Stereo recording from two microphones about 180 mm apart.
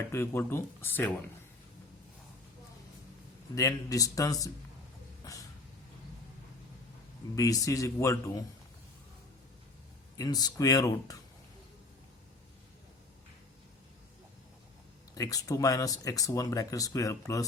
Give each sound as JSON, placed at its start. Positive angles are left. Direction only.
{"t": 0.1, "sound": "speech", "side_deg": 15}
{"t": 3.5, "sound": "speech", "side_deg": 20}
{"t": 5.2, "sound": "a sound", "side_deg": 20}
{"t": 7.3, "sound": "speech", "side_deg": 20}
{"t": 10.2, "sound": "speech", "side_deg": 20}
{"t": 15.1, "sound": "speech", "side_deg": 20}